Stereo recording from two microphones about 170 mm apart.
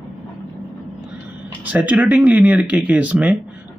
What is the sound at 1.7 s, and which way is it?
Speech, 10° right (ahead or behind).